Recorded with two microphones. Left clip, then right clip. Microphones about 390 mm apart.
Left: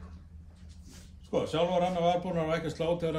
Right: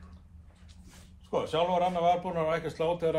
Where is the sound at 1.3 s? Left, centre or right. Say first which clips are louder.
Right 1 dB; right.